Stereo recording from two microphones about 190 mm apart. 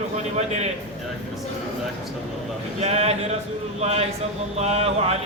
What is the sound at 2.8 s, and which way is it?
Speech, 35° right (ahead or behind).